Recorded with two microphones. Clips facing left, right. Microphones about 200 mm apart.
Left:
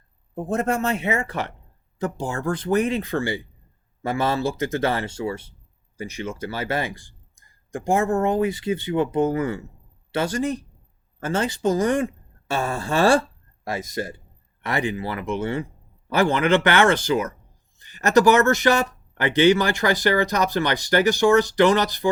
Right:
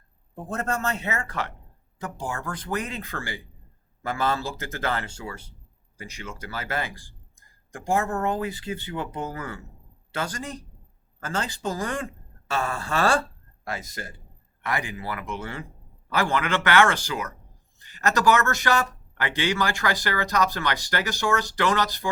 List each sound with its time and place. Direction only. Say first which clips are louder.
0.4 s speech: left 5 dB; 15° left (ahead or behind)
12.5 s speech: left 3 dB; 30° left (ahead or behind)